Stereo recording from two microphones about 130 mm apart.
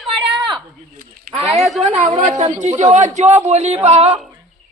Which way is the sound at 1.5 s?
Centre (ahead or behind).